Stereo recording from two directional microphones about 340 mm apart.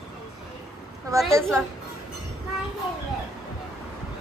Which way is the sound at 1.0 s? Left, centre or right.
Centre.